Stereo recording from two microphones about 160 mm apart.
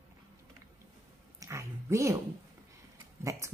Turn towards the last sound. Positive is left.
turn(degrees=-20)  # may be behind; listen again after turning